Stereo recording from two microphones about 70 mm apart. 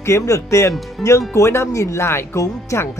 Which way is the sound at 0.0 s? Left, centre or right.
Left.